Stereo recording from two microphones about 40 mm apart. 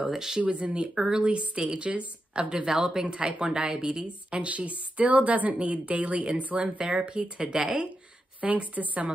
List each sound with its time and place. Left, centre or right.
0.0 s speech: centre
0.4 s a woman's voice: right
8.4 s speech: right